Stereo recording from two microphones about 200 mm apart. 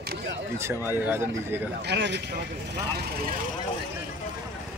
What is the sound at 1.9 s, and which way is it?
Speech, 60° right (ahead or behind).